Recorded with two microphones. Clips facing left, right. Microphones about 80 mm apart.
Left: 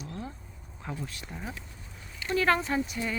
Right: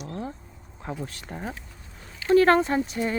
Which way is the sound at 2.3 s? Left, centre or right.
Right.